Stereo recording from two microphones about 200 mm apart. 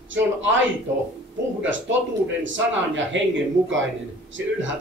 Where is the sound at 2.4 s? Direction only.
70° right (ahead or behind).